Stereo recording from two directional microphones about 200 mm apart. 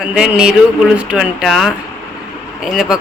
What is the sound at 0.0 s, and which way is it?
Speech, 5° right (ahead or behind).